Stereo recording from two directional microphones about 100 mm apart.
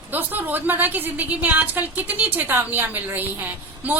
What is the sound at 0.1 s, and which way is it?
A woman's voice, 20° right (ahead or behind).